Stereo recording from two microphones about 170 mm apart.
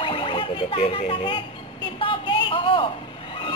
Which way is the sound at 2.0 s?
30° left (ahead or behind).